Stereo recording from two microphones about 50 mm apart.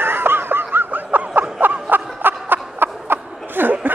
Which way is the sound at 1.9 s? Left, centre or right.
Right.